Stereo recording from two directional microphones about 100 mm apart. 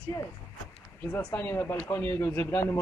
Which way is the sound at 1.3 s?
25° left (ahead or behind).